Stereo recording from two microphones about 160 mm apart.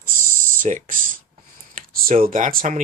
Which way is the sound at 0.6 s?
55° right (ahead or behind).